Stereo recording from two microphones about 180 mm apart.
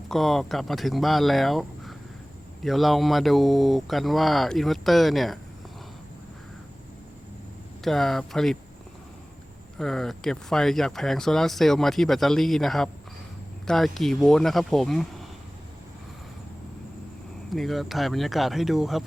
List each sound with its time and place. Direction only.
0.1 s speech: centre (ahead or behind)
7.9 s speech: centre (ahead or behind)
9.7 s speech: centre (ahead or behind)
17.5 s speech: centre (ahead or behind)